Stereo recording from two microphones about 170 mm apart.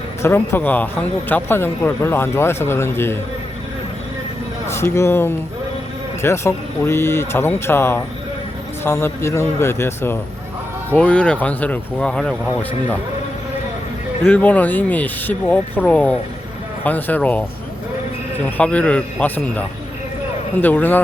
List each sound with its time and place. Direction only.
0.2 s speech: 15° left (ahead or behind)
4.7 s speech: 15° left (ahead or behind)
14.3 s speech: 10° left (ahead or behind)
18.5 s speech: 10° left (ahead or behind)